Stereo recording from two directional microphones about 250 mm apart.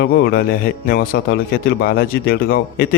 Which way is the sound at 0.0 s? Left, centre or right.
Left.